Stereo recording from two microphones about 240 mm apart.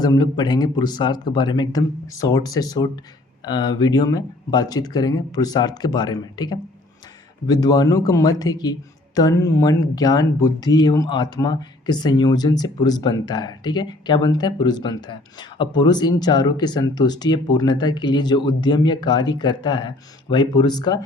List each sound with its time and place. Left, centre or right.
0.0 s speech: centre